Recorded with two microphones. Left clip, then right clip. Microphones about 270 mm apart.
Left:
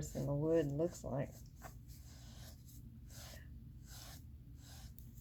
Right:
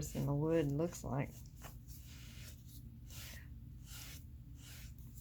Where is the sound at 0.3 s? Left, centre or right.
Right.